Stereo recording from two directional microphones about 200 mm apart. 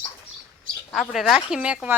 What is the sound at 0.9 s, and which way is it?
Speech, centre (ahead or behind).